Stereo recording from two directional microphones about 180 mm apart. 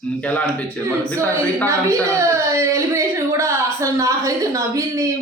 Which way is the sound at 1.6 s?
15° right (ahead or behind).